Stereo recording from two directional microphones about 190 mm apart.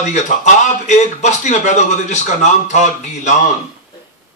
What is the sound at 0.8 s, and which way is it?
Speech, 40° left (ahead or behind).